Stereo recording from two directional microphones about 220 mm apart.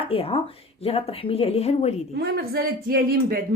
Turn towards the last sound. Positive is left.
turn(degrees=-40)  # may be behind; listen again after turning